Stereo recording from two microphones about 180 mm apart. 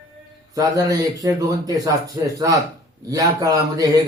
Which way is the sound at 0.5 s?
20° right (ahead or behind).